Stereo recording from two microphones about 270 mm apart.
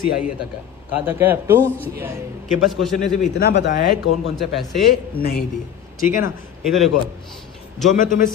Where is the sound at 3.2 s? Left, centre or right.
Left.